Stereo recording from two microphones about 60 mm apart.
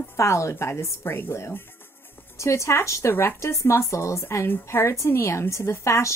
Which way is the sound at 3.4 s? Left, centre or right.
Left.